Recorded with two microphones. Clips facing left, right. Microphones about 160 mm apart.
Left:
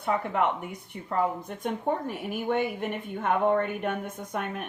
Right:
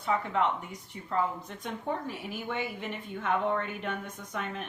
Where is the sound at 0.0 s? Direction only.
55° left (ahead or behind).